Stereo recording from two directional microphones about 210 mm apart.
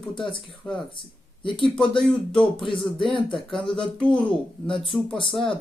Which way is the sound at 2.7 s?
25° left (ahead or behind).